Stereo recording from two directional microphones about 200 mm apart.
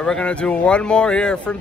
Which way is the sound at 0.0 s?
5° left (ahead or behind).